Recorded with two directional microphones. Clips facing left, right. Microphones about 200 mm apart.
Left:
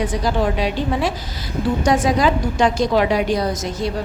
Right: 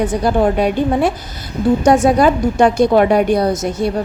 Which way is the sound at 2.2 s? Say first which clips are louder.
Right 5 dB; 55° right (ahead or behind).